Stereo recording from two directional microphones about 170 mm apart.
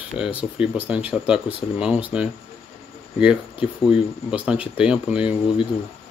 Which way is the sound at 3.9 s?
5° right (ahead or behind).